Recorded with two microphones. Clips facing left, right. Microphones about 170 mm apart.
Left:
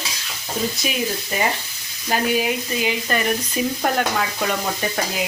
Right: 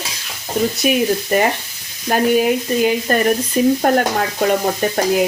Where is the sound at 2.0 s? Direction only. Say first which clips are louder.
Right 6 dB; 50° right (ahead or behind).